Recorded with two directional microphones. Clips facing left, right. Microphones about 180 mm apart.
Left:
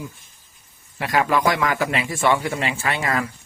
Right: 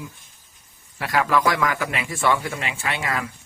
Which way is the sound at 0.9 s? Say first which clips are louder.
Left 1 dB; 20° left (ahead or behind).